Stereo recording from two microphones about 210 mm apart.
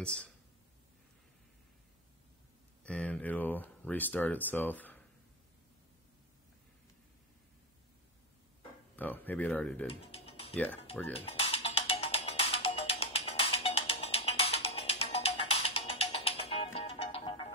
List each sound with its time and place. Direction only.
0.0 s speech: 5° left (ahead or behind)
2.8 s speech: 5° left (ahead or behind)
8.9 s speech: 10° left (ahead or behind)
9.8 s music: 30° left (ahead or behind)
10.5 s speech: 5° left (ahead or behind)
11.1 s music: 25° left (ahead or behind)